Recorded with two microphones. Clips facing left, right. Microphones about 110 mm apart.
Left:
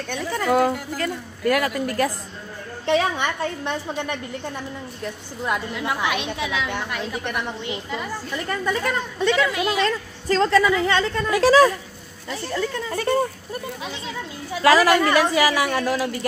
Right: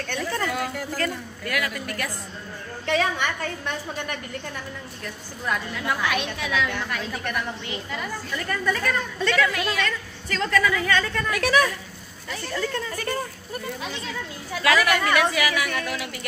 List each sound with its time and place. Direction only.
0.0 s speech: 10° left (ahead or behind)
0.5 s a sound: 40° left (ahead or behind)
0.7 s speech: 15° left (ahead or behind)
1.4 s a woman's voice: 35° left (ahead or behind)
9.8 s a woman's voice: 35° left (ahead or behind)
12.3 s speech: 15° left (ahead or behind)
12.9 s a woman's voice: 25° left (ahead or behind)
14.6 s a woman's voice: 30° left (ahead or behind)